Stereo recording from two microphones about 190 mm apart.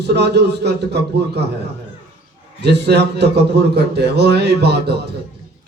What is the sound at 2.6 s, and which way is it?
A man's voice, 60° right (ahead or behind).